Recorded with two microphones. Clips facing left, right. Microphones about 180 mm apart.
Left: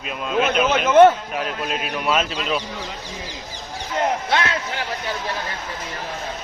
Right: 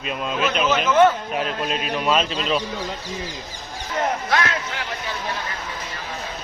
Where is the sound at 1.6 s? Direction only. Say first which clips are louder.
Right 1 dB; 5° left (ahead or behind).